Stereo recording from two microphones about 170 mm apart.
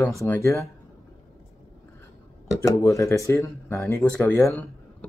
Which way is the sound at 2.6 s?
20° left (ahead or behind).